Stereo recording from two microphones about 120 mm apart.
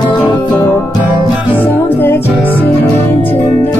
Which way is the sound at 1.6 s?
15° left (ahead or behind).